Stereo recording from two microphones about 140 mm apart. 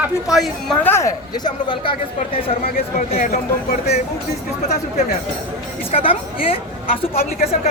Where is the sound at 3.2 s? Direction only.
90° left.